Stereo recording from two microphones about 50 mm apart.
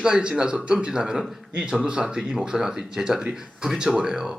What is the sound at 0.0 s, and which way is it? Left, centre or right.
Speech, centre.